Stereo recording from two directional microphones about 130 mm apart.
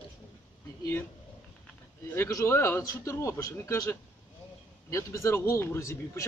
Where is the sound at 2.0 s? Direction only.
20° left (ahead or behind).